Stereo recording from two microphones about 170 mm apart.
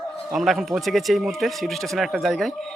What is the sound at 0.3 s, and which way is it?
Speech, centre (ahead or behind).